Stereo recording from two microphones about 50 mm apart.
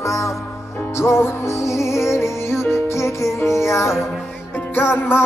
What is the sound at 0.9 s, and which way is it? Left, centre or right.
Music, left.